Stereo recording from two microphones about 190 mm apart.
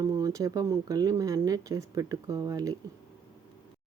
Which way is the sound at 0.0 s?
20° right (ahead or behind).